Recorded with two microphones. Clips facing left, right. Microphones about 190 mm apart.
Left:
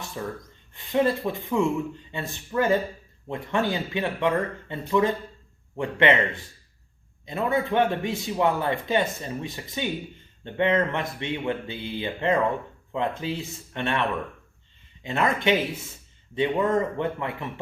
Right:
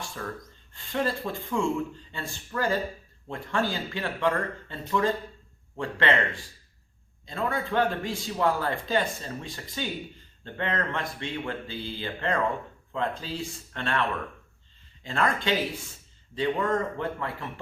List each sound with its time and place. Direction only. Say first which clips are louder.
0.2 s speech: left 7 dB; 15° left (ahead or behind)
15.0 s speech: left 4 dB; 20° left (ahead or behind)